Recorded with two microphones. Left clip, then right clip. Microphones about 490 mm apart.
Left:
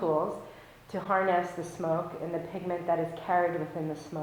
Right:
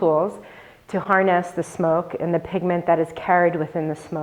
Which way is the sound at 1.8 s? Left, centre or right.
Right.